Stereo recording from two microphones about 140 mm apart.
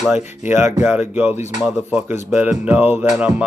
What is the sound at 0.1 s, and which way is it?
Speech, 15° right (ahead or behind).